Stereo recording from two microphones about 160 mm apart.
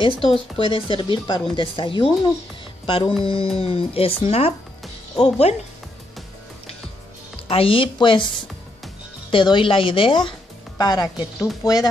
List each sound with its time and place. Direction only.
0.0 s speech: 30° left (ahead or behind)
7.4 s speech: 35° left (ahead or behind)
9.3 s a woman's voice: 30° left (ahead or behind)